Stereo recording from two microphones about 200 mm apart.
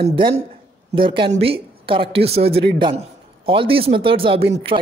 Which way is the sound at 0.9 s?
25° right (ahead or behind).